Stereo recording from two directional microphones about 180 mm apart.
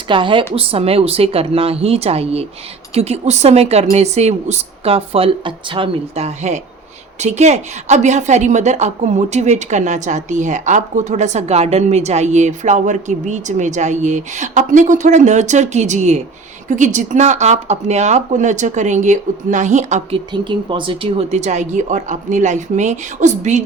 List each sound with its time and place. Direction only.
0.1 s a woman's voice: 25° right (ahead or behind)
20.3 s a woman's voice: 25° right (ahead or behind)